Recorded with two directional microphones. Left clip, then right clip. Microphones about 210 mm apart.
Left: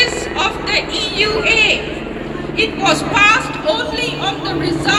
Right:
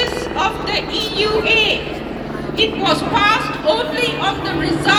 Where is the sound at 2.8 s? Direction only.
10° right (ahead or behind).